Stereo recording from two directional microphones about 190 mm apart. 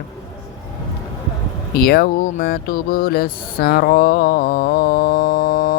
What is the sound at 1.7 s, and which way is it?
Speech, 55° left (ahead or behind).